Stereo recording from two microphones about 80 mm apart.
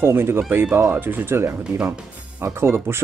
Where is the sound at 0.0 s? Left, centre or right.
Right.